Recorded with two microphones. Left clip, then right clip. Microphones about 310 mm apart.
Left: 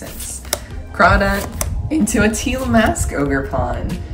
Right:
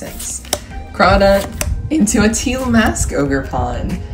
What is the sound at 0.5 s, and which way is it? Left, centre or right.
Music, centre.